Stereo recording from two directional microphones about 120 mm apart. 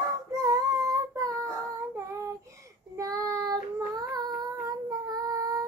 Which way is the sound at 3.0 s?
30° right (ahead or behind).